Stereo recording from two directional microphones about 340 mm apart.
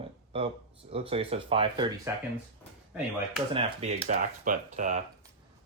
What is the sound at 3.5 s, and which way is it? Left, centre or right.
Speech, centre.